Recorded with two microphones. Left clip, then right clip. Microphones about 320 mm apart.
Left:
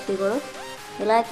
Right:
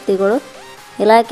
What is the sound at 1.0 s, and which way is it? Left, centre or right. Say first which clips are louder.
Speech: right 10 dB; centre.